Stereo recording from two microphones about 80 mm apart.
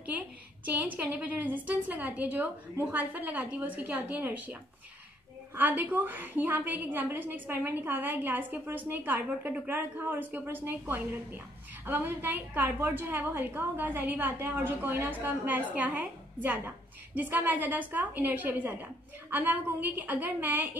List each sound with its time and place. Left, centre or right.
0.7 s a woman's voice: centre
5.6 s a woman's voice: right